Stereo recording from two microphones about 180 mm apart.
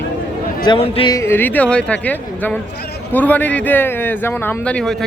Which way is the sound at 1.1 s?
15° left (ahead or behind).